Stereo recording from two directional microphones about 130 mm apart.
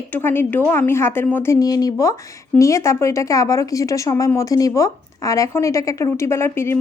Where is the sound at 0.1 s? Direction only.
15° left (ahead or behind).